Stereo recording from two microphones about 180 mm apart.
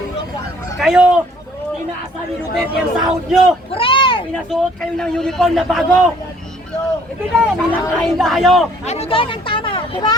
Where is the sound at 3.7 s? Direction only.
30° left (ahead or behind).